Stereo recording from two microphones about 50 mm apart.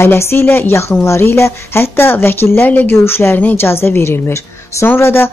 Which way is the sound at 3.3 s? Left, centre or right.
Left.